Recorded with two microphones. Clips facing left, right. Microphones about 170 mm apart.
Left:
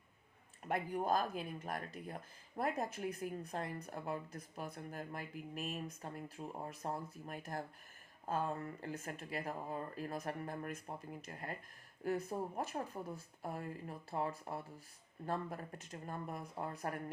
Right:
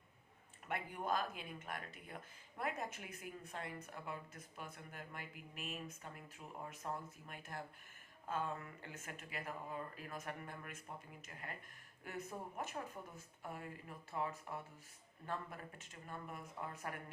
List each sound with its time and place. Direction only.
0.6 s speech: 40° left (ahead or behind)